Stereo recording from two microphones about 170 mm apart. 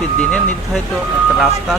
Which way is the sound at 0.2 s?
5° left (ahead or behind).